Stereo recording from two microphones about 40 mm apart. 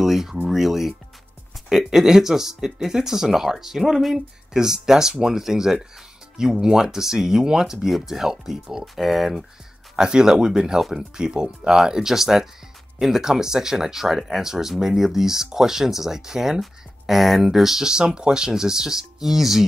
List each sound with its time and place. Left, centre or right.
0.0 s speech: centre
9.9 s speech: centre